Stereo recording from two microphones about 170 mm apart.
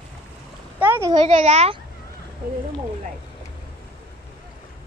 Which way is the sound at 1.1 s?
30° right (ahead or behind).